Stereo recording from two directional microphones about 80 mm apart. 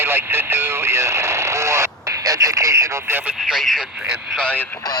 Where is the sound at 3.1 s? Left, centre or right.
Right.